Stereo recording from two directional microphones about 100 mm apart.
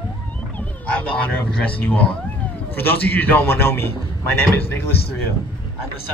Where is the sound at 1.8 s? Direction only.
15° left (ahead or behind).